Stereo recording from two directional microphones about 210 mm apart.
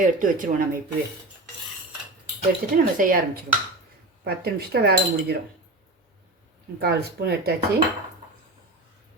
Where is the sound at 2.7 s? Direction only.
40° right (ahead or behind).